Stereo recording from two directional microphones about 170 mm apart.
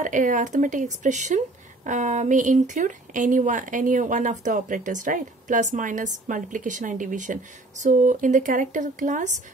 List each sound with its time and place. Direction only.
0.0 s speech: 50° right (ahead or behind)